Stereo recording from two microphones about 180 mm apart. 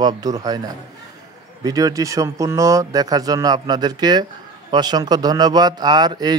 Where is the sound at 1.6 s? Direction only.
20° right (ahead or behind).